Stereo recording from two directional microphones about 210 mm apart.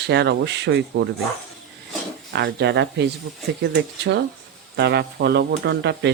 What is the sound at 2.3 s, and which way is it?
Speech, 55° right (ahead or behind).